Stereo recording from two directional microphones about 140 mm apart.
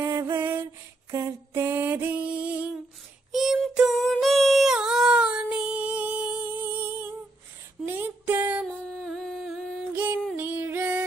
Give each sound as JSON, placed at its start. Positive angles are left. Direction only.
{"t": 0.0, "sound": "music", "side_deg": -20}
{"t": 1.1, "sound": "mantra", "side_deg": -20}
{"t": 3.3, "sound": "a sound", "side_deg": 0}
{"t": 7.8, "sound": "music", "side_deg": -15}
{"t": 8.8, "sound": "music", "side_deg": 0}
{"t": 9.9, "sound": "music", "side_deg": -10}